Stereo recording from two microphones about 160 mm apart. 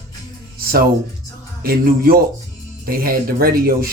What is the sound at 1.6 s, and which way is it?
Speech, 70° right (ahead or behind).